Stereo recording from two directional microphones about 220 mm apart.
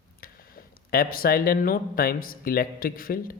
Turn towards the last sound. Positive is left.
turn(degrees=40)  # may be behind; listen again after turning